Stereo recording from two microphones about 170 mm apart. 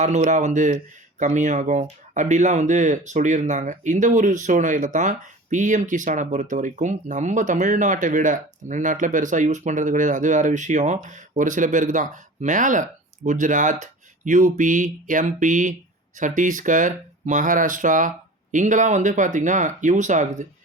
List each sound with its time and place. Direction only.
0.0 s speech: 45° right (ahead or behind)